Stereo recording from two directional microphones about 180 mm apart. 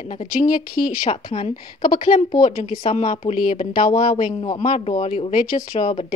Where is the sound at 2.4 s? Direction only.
40° left (ahead or behind).